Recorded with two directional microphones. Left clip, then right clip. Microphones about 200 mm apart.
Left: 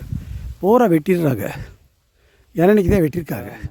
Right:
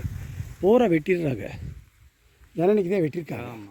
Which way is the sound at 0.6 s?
30° left (ahead or behind).